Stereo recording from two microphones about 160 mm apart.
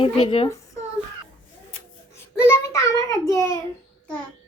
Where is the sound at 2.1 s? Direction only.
15° left (ahead or behind).